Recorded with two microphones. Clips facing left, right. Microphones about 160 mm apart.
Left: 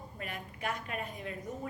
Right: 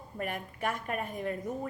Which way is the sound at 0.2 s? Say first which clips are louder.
Right 6 dB; 50° right (ahead or behind).